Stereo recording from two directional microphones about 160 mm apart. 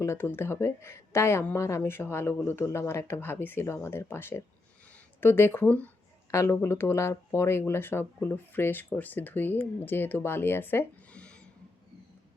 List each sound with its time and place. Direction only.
0.0 s speech: 15° left (ahead or behind)